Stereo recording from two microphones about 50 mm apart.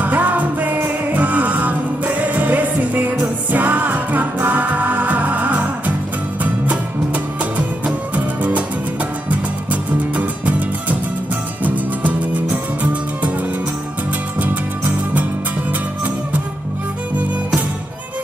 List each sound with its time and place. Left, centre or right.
0.0 s music: right
7.5 s music: right
14.4 s music: right